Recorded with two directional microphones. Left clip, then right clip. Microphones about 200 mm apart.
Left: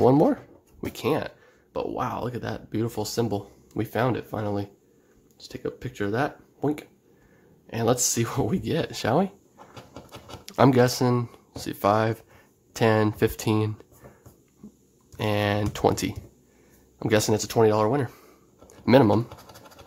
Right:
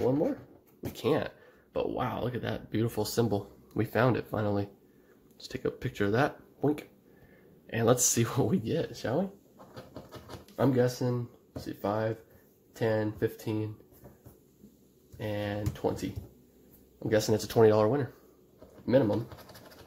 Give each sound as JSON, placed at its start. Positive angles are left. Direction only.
{"t": 0.9, "sound": "speech", "side_deg": 10}
{"t": 8.7, "sound": "speech", "side_deg": 30}
{"t": 10.5, "sound": "speech", "side_deg": 35}
{"t": 15.1, "sound": "speech", "side_deg": 35}
{"t": 17.3, "sound": "speech", "side_deg": 15}
{"t": 18.9, "sound": "speech", "side_deg": 35}